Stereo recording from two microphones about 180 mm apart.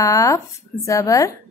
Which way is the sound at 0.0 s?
15° left (ahead or behind).